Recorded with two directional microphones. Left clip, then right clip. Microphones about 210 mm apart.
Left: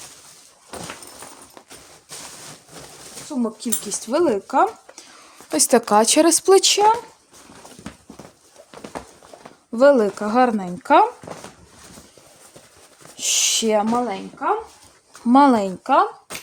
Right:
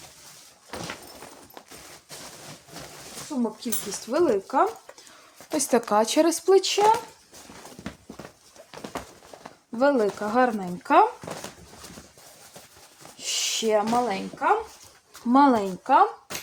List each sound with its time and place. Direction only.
3.6 s speech: 50° left (ahead or behind)
5.5 s speech: 45° left (ahead or behind)
9.7 s speech: 55° left (ahead or behind)
13.1 s a sound: 55° left (ahead or behind)
14.0 s speech: 30° left (ahead or behind)
15.3 s speech: 55° left (ahead or behind)